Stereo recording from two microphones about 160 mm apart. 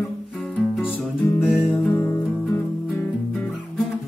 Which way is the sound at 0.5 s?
5° left (ahead or behind).